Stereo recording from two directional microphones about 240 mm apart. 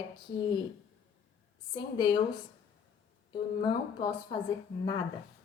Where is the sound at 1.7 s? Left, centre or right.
Centre.